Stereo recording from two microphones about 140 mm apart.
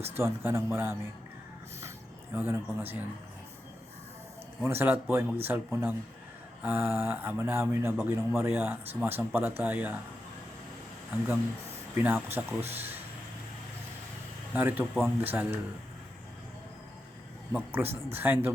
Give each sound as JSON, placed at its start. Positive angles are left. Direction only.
{"t": 0.0, "sound": "speech", "side_deg": -15}
{"t": 2.3, "sound": "speech", "side_deg": -15}
{"t": 4.6, "sound": "speech", "side_deg": -15}
{"t": 11.9, "sound": "speech", "side_deg": -15}
{"t": 14.5, "sound": "speech", "side_deg": -10}
{"t": 17.5, "sound": "speech", "side_deg": -15}